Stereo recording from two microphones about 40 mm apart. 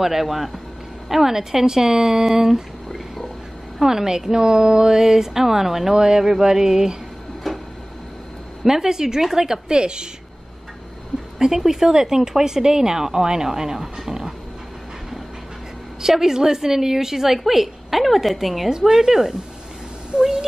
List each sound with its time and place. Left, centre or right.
0.0 s speech: centre
3.8 s speech: centre
7.5 s a sound: centre
8.6 s speech: centre
11.3 s speech: centre
16.0 s speech: centre